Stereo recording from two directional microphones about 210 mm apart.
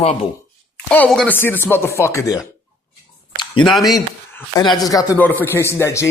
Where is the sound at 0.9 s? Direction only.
5° left (ahead or behind).